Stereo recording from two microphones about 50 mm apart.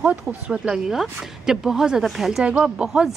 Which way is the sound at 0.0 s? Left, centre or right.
Centre.